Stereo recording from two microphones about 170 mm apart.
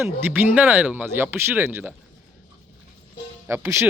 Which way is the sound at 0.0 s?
10° right (ahead or behind).